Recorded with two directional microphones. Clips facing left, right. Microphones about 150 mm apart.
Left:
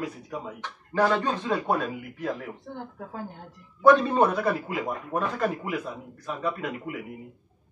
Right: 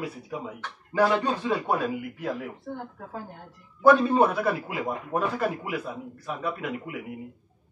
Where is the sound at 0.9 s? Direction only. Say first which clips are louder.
Right 1 dB; 10° right (ahead or behind).